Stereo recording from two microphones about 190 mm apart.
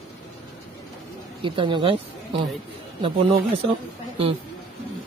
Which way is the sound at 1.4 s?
25° right (ahead or behind).